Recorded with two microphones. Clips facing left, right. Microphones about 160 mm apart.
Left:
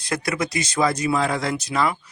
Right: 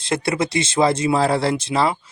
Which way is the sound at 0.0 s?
25° right (ahead or behind).